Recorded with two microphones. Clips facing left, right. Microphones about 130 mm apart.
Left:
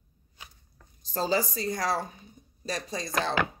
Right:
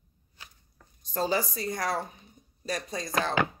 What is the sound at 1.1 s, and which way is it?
Speech, 30° left (ahead or behind).